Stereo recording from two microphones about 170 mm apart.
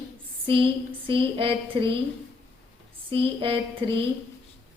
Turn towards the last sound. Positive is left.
turn(degrees=-30)  # may be behind; listen again after turning